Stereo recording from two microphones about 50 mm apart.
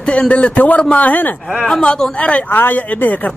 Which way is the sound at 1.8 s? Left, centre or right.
Centre.